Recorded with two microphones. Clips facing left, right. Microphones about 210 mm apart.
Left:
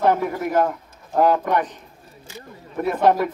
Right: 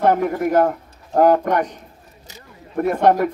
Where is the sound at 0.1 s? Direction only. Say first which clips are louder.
Right 3 dB; 45° right (ahead or behind).